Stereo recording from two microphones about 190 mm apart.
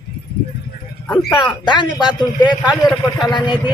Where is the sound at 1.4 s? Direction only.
25° left (ahead or behind).